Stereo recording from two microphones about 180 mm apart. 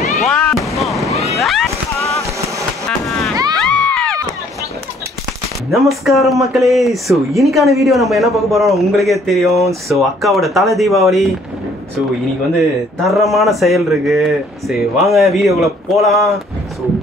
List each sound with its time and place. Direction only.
0.3 s fireworks: centre (ahead or behind)
0.7 s boat: centre (ahead or behind)
1.3 s a sound: centre (ahead or behind)
3.5 s crowd: 5° left (ahead or behind)
5.7 s speech: centre (ahead or behind)
12.5 s speech: centre (ahead or behind)